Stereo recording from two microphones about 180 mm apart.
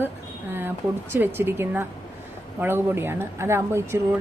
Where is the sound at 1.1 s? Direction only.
10° right (ahead or behind).